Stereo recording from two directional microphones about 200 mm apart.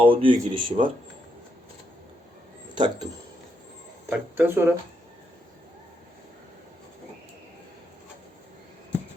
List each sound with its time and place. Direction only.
0.0 s speech: 25° right (ahead or behind)
2.7 s speech: 25° right (ahead or behind)
4.1 s speech: 10° right (ahead or behind)